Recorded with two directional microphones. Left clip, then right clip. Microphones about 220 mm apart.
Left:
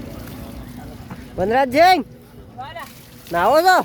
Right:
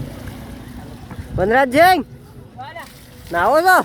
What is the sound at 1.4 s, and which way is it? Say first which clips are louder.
Speech: right 2 dB; 5° right (ahead or behind).